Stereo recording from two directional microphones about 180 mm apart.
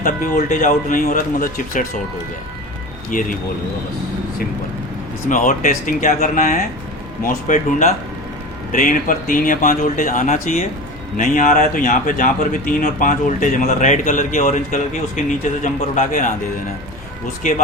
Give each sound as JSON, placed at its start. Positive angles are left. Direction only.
{"t": 0.0, "sound": "a man's voice", "side_deg": 50}
{"t": 3.1, "sound": "a man's voice", "side_deg": 50}
{"t": 5.3, "sound": "a man's voice", "side_deg": 45}